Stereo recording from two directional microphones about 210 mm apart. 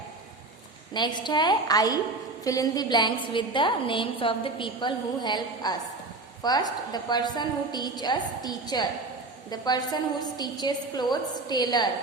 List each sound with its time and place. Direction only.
0.9 s a woman's voice: 20° left (ahead or behind)